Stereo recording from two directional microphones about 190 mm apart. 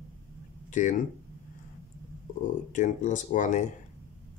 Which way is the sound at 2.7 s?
40° left (ahead or behind).